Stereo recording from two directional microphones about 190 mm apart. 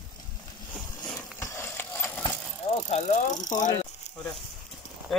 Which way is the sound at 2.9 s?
40° left (ahead or behind).